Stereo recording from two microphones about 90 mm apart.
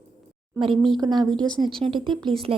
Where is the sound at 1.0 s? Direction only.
50° right (ahead or behind).